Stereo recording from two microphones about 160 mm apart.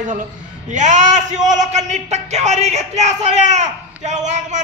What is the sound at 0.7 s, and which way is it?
A man's voice, 50° right (ahead or behind).